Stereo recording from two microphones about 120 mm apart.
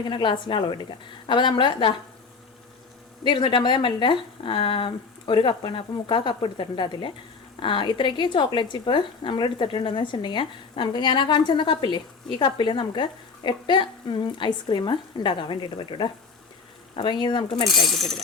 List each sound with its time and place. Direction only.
0.1 s speech: 45° left (ahead or behind)
3.2 s a woman's voice: 40° left (ahead or behind)
17.7 s speech: centre (ahead or behind)